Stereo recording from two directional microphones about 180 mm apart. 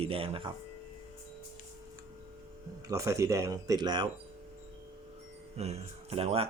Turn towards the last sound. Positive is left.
turn(degrees=-35)  # may be behind; listen again after turning